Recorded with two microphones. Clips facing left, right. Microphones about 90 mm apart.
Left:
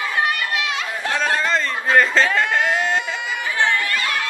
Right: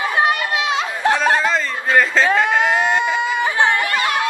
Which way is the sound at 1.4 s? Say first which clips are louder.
Right 2 dB; 5° right (ahead or behind).